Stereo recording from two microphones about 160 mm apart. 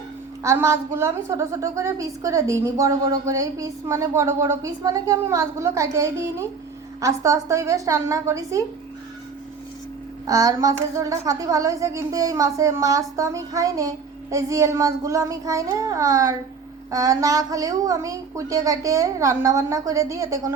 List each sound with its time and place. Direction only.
0.4 s speech: 20° right (ahead or behind)
10.2 s speech: 20° right (ahead or behind)